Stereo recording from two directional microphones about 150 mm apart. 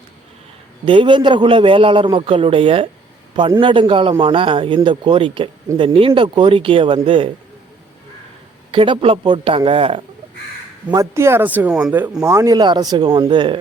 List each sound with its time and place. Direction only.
0.9 s a man's voice: 35° right (ahead or behind)
8.7 s a man's voice: 35° right (ahead or behind)
10.9 s a man's voice: 20° right (ahead or behind)